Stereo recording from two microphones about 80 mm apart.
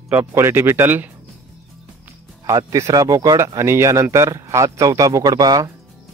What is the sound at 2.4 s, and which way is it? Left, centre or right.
Speech, right.